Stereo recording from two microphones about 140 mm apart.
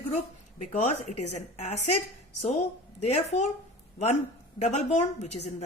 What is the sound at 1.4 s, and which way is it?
Speech, 50° left (ahead or behind).